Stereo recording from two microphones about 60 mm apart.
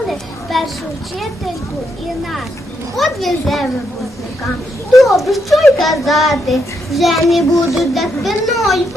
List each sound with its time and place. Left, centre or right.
0.1 s a sound: centre
2.9 s a child's voice: centre
4.9 s a child's voice: centre